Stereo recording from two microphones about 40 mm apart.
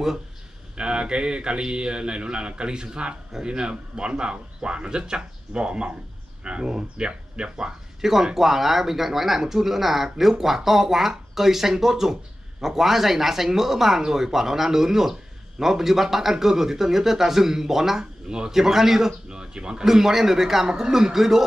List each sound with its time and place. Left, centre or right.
0.7 s a man's voice: right
8.0 s speech: centre
19.2 s speech: right
19.8 s speech: centre